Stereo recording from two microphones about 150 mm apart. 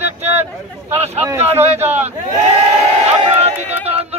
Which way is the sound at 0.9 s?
50° right (ahead or behind).